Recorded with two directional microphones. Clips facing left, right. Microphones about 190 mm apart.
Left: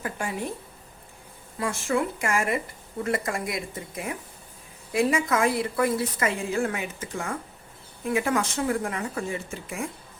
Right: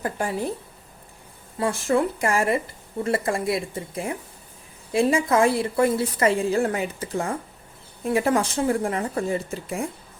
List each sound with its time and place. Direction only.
0.0 s a woman's voice: 35° right (ahead or behind)
1.5 s a woman's voice: 35° right (ahead or behind)